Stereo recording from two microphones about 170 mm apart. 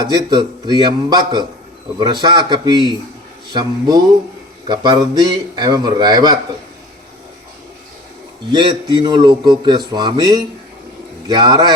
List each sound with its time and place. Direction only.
0.0 s a man's voice: 25° right (ahead or behind)
8.5 s a man's voice: 30° right (ahead or behind)